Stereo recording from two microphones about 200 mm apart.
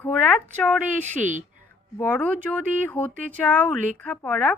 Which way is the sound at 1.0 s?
40° right (ahead or behind).